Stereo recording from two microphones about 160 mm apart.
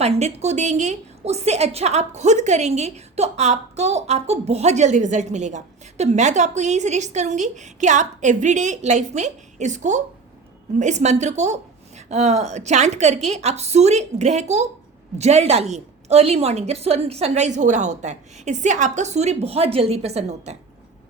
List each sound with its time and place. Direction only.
0.0 s a woman's voice: 45° right (ahead or behind)